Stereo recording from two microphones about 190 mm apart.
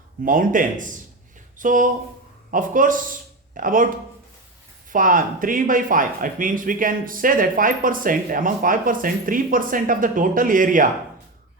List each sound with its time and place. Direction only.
0.3 s speech: 45° right (ahead or behind)